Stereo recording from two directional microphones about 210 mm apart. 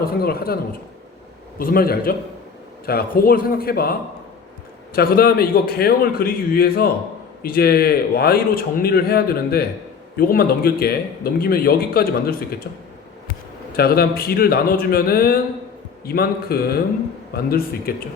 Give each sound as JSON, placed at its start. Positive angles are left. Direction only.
{"t": 0.0, "sound": "a man's voice", "side_deg": 45}
{"t": 4.9, "sound": "a man's voice", "side_deg": 45}
{"t": 13.7, "sound": "a man's voice", "side_deg": 45}